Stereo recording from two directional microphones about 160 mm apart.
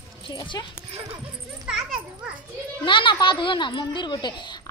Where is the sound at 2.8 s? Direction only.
30° left (ahead or behind).